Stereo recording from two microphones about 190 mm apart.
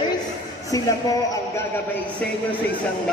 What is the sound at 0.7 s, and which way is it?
Speech, 20° left (ahead or behind).